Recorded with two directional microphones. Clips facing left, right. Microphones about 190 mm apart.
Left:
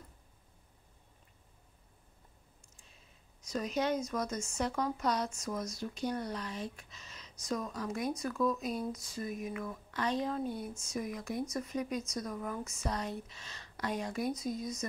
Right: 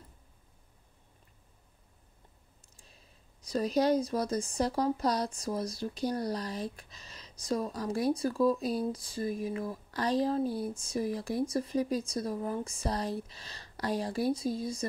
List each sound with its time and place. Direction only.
3.4 s speech: 35° right (ahead or behind)